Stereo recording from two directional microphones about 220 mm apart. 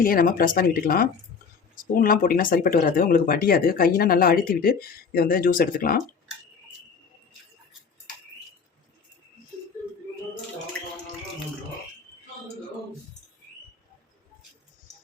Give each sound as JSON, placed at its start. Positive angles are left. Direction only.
{"t": 0.0, "sound": "speech", "side_deg": 40}